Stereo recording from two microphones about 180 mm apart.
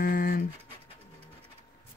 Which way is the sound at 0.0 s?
55° left (ahead or behind).